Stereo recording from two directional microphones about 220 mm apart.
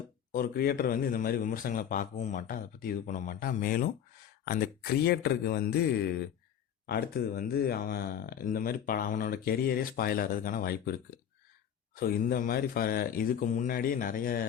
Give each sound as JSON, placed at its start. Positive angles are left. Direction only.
{"t": 0.3, "sound": "a man's voice", "side_deg": 40}